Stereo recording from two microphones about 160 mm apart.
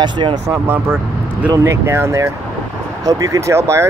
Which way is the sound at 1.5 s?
15° right (ahead or behind).